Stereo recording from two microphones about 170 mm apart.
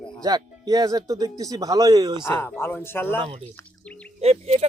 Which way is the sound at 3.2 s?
35° right (ahead or behind).